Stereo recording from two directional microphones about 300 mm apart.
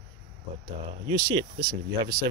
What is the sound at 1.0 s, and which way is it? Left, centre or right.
Speech, centre.